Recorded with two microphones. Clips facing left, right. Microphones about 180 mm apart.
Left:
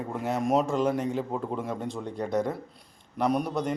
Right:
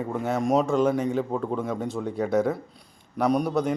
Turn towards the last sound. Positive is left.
turn(degrees=0)  # may be behind; listen again after turning